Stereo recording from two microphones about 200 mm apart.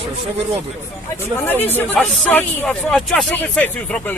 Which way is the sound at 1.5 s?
10° left (ahead or behind).